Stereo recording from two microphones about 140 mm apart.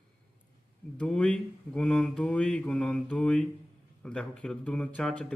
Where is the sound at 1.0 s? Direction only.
10° left (ahead or behind).